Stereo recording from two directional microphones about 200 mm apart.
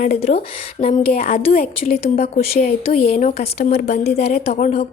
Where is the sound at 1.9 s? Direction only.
30° left (ahead or behind).